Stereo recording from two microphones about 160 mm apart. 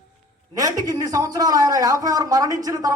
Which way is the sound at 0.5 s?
25° right (ahead or behind).